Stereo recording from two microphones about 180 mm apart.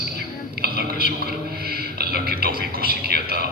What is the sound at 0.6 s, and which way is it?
Whispering, 60° right (ahead or behind).